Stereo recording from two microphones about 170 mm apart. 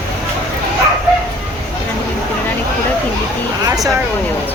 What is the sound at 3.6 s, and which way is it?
Speech, 20° right (ahead or behind).